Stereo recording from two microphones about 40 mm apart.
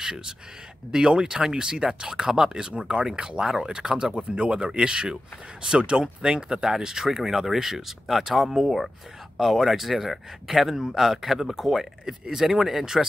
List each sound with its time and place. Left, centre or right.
0.0 s a man's voice: centre